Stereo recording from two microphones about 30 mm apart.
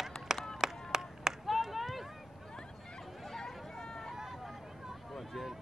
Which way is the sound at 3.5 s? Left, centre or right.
Centre.